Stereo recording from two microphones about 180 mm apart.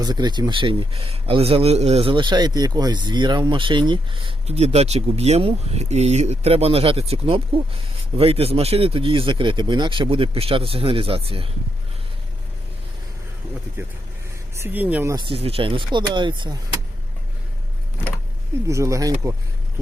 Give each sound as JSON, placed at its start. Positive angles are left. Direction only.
{"t": 0.0, "sound": "speech", "side_deg": -25}
{"t": 13.8, "sound": "speech", "side_deg": -15}
{"t": 15.1, "sound": "speech", "side_deg": -30}
{"t": 18.7, "sound": "speech", "side_deg": -15}